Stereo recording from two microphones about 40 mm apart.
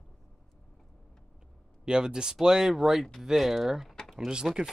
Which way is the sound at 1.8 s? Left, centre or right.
Centre.